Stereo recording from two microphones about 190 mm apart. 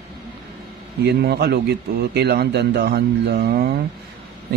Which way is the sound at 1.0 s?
60° right (ahead or behind).